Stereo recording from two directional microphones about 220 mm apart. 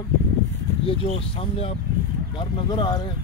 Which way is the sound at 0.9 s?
25° left (ahead or behind).